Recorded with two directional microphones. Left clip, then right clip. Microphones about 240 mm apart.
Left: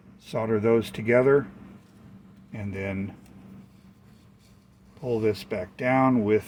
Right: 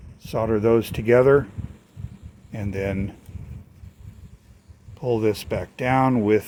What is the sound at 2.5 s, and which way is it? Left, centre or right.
Speech, right.